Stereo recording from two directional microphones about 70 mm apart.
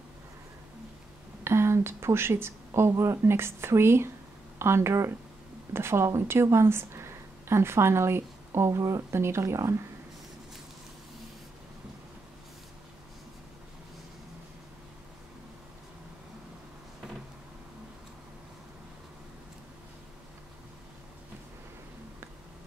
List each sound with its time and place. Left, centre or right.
1.4 s a woman's voice: right